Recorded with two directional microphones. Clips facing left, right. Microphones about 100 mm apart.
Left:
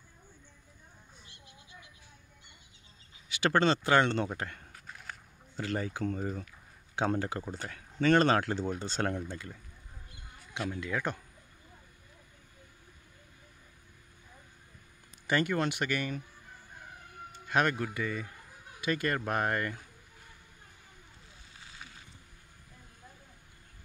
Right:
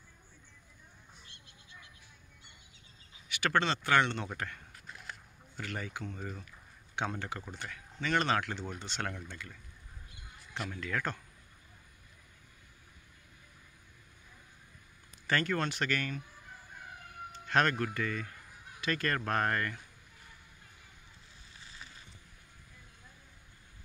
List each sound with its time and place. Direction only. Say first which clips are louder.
1.2 s a sound: left 3 dB; 15° left (ahead or behind)
3.3 s speech: left 4 dB; 30° left (ahead or behind)
5.6 s speech: left 7 dB; 30° left (ahead or behind)
10.5 s speech: left 3 dB; 15° left (ahead or behind)
15.2 s speech: left 3 dB; 15° left (ahead or behind)
17.5 s speech: even; 10° left (ahead or behind)